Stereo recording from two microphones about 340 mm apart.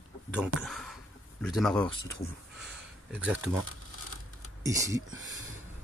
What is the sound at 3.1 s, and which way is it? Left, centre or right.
Speech, centre.